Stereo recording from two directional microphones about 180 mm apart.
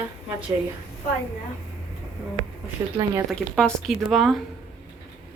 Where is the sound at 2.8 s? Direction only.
20° right (ahead or behind).